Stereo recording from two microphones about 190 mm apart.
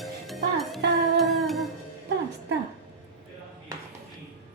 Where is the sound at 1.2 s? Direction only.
Centre (ahead or behind).